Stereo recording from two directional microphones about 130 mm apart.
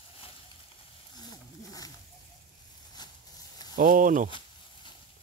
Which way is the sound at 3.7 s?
85° right.